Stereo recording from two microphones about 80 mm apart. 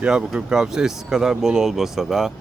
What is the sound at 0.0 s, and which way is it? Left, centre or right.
Speech, centre.